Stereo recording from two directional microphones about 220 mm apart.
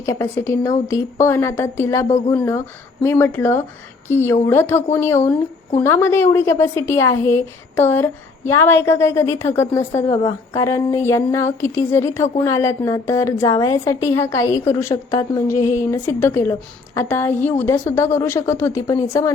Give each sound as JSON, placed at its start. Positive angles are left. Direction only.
{"t": 0.0, "sound": "a woman's voice", "side_deg": 15}
{"t": 2.0, "sound": "speech", "side_deg": 30}
{"t": 2.3, "sound": "a woman's voice", "side_deg": 15}